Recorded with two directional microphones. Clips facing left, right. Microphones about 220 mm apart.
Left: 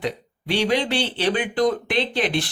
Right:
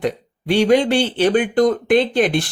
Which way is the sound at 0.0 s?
50° right (ahead or behind).